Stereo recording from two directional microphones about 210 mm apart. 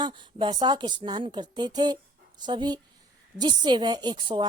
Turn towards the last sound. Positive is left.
turn(degrees=-25)  # may be behind; listen again after turning